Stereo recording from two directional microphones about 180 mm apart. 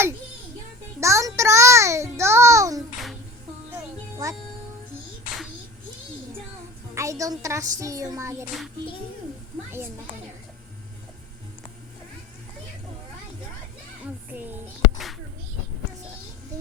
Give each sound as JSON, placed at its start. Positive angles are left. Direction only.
{"t": 0.9, "sound": "child singing", "side_deg": -15}
{"t": 4.2, "sound": "music", "side_deg": -20}
{"t": 6.9, "sound": "a woman's voice", "side_deg": -15}
{"t": 14.0, "sound": "music", "side_deg": -10}